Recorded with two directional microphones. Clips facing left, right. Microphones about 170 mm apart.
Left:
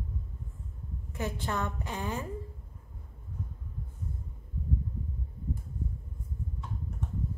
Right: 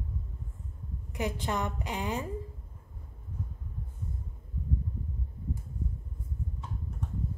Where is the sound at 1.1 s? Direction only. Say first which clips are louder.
Right 2 dB; 15° right (ahead or behind).